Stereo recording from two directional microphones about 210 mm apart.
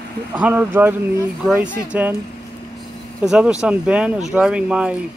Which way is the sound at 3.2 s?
5° right (ahead or behind).